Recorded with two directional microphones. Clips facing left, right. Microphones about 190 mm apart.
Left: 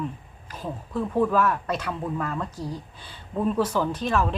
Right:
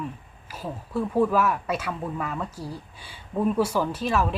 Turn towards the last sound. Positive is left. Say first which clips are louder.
# even
turn(degrees=-5)  # may be behind; listen again after turning